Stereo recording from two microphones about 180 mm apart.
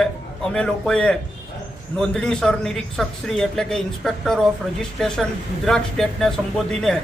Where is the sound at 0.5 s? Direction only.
5° left (ahead or behind).